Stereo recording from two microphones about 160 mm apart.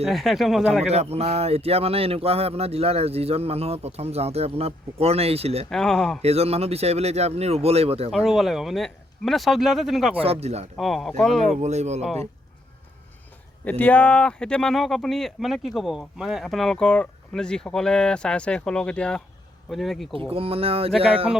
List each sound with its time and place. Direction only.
0.1 s speech: centre (ahead or behind)
0.7 s speech: 40° right (ahead or behind)
5.7 s speech: 5° left (ahead or behind)
6.2 s speech: 40° right (ahead or behind)
8.1 s speech: centre (ahead or behind)
10.2 s speech: 40° right (ahead or behind)
10.8 s speech: centre (ahead or behind)
11.6 s speech: 45° right (ahead or behind)
13.7 s speech: 10° left (ahead or behind)
20.3 s speech: 35° right (ahead or behind)